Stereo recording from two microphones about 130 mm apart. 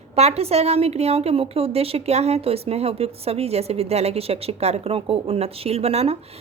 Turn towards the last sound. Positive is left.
turn(degrees=-50)  # may be behind; listen again after turning